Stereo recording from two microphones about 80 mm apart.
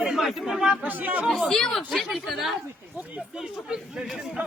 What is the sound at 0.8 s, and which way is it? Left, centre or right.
Speech, right.